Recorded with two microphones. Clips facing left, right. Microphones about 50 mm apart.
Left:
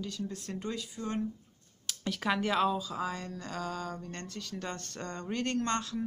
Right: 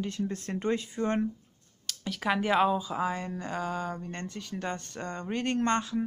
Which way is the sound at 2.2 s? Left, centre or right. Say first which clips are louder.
Right 3 dB; centre.